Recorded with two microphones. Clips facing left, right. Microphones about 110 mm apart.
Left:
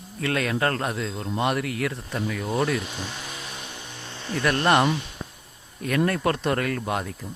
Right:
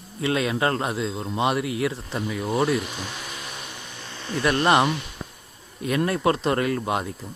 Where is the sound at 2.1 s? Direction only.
15° right (ahead or behind).